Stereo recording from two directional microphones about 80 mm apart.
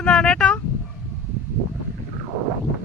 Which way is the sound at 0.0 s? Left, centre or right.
Centre.